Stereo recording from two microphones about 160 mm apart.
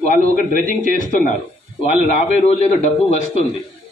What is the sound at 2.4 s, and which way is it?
Speech, 45° left (ahead or behind).